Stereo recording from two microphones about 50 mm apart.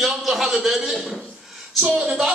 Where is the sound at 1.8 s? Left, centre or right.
Centre.